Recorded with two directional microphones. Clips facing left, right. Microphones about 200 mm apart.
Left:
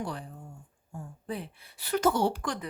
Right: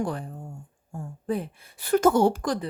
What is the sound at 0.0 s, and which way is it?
Speech, 50° right (ahead or behind).